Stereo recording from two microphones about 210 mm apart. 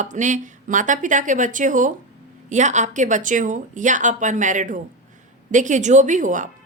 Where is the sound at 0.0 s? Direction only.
35° right (ahead or behind).